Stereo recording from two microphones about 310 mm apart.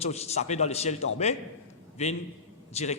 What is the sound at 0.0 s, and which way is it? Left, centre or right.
A man's voice, centre.